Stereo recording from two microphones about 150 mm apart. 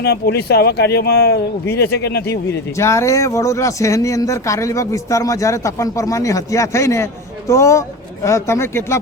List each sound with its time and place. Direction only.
0.0 s speech: 90° left
2.7 s speech: 20° left (ahead or behind)